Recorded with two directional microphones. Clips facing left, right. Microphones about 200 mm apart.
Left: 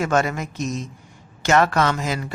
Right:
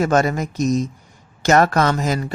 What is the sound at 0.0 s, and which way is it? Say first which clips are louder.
Speech: right 4 dB; 40° right (ahead or behind).